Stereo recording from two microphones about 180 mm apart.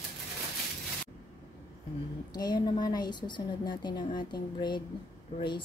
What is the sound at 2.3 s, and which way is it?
A woman's voice, 25° left (ahead or behind).